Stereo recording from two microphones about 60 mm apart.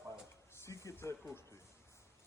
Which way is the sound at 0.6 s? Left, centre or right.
Left.